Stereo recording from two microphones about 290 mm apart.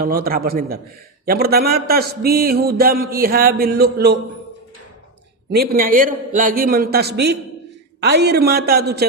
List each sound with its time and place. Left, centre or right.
0.0 s a man's voice: right
5.5 s a man's voice: right